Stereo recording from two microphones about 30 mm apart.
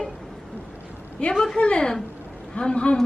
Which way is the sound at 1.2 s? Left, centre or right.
Left.